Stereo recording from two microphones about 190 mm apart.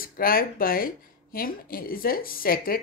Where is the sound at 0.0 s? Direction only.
50° left (ahead or behind).